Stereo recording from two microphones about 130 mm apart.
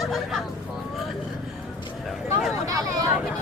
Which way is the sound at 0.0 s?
Centre (ahead or behind).